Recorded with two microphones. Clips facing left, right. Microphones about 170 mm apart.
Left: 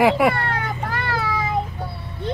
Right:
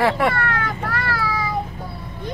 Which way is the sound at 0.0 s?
15° left (ahead or behind).